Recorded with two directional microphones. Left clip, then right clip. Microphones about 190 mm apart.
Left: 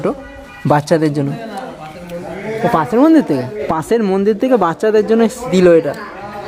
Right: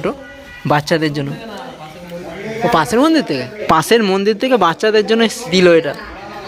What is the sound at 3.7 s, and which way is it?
Speech, centre (ahead or behind).